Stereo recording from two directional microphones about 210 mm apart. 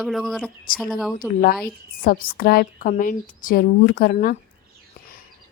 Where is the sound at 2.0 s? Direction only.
40° left (ahead or behind).